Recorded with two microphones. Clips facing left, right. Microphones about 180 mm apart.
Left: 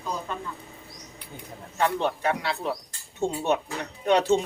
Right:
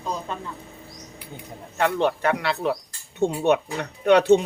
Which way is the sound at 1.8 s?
70° right (ahead or behind).